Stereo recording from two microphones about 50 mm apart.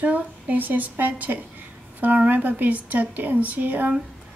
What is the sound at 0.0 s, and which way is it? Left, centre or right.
A woman's voice, right.